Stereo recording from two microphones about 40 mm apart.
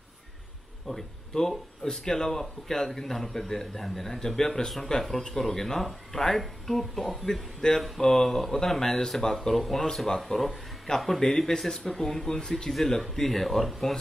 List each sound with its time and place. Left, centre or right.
0.9 s speech: centre
12.4 s speech: centre